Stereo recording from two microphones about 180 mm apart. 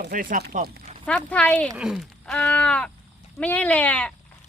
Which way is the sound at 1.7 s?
5° right (ahead or behind).